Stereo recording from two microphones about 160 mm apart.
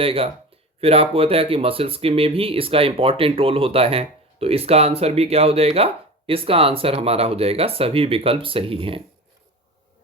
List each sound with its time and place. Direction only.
0.0 s speech: 35° right (ahead or behind)